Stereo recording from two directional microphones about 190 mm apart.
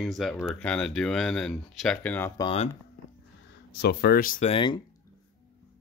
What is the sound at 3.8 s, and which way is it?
Speech, 60° left (ahead or behind).